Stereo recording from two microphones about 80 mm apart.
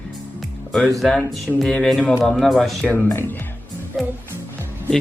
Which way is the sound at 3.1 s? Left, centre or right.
Left.